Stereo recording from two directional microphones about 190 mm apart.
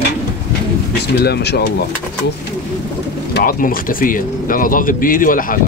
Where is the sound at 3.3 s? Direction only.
50° left (ahead or behind).